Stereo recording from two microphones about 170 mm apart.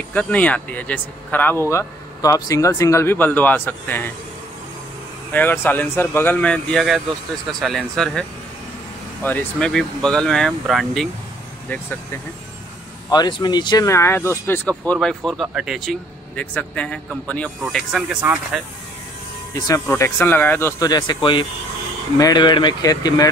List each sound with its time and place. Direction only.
0.1 s speech: 10° left (ahead or behind)
5.3 s a man's voice: 10° left (ahead or behind)
13.1 s a man's voice: 25° left (ahead or behind); by 17.8 s 5° left (ahead or behind)
17.9 s a man's voice: 10° right (ahead or behind)
19.5 s speech: 15° left (ahead or behind)